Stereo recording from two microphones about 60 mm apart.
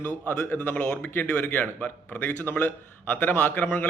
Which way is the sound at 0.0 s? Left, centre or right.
Left.